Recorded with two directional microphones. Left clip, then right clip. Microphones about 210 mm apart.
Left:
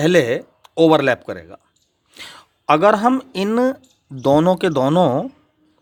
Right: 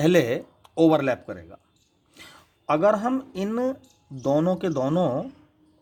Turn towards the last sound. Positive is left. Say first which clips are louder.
# left 8 dB
turn(degrees=35)  # may be behind; listen again after turning